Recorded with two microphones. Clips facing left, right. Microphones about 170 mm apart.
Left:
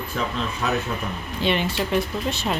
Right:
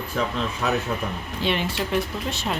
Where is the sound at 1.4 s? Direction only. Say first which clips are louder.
Left 2 dB; centre (ahead or behind).